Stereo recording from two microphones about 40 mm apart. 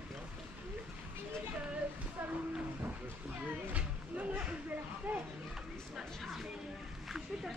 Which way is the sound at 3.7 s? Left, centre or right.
Right.